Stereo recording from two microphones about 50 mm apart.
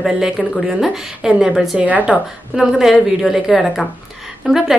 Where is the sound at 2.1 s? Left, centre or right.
Centre.